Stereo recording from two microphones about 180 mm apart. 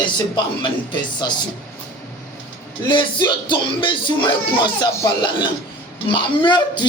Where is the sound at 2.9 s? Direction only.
25° left (ahead or behind).